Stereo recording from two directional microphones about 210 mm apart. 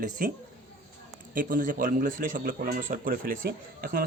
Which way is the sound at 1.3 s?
40° right (ahead or behind).